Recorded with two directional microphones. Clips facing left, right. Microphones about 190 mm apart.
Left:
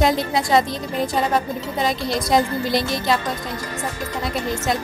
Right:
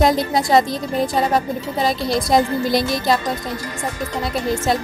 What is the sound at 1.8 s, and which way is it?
Music, 40° right (ahead or behind).